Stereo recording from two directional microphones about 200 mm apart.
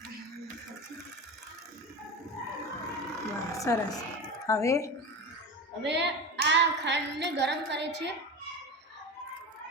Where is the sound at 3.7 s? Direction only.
15° left (ahead or behind).